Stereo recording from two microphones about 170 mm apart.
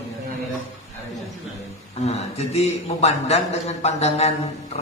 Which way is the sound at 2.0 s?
40° left (ahead or behind).